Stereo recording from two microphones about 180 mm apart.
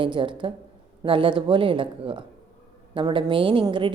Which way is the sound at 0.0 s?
25° right (ahead or behind).